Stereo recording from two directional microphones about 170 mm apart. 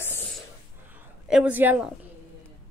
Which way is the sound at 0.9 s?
5° right (ahead or behind).